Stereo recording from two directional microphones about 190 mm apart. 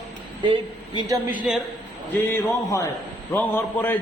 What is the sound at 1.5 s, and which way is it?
Speech, 5° right (ahead or behind).